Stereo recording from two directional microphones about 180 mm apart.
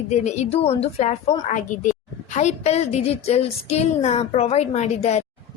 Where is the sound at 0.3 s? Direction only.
35° left (ahead or behind).